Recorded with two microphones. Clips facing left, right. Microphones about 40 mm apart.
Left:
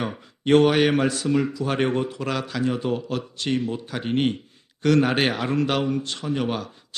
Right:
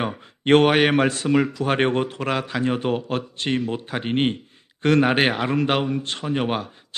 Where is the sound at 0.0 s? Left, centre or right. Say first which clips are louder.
Right 2 dB; right.